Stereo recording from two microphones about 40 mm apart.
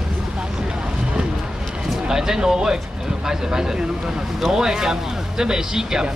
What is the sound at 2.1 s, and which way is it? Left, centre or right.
Speech, centre.